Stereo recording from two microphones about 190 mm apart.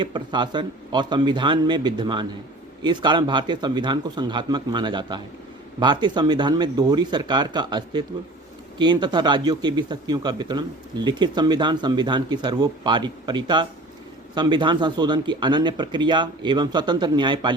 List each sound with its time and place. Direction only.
0.0 s speech: 25° right (ahead or behind)